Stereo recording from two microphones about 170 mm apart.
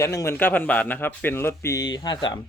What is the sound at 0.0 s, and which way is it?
A man's voice, 15° left (ahead or behind).